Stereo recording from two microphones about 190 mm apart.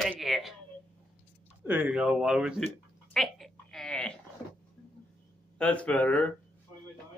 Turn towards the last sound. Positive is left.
turn(degrees=5)  # may be behind; listen again after turning